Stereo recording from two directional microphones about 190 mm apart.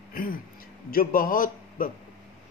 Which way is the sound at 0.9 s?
50° left (ahead or behind).